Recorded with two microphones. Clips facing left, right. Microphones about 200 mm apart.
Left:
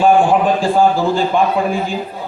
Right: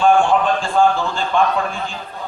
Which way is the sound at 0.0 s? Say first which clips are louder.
Left 3 dB; 10° left (ahead or behind).